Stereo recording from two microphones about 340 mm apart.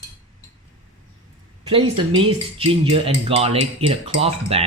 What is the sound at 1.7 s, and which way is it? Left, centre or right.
Speech, centre.